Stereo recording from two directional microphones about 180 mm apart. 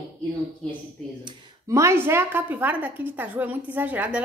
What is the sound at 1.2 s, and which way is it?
A woman's voice, 15° right (ahead or behind).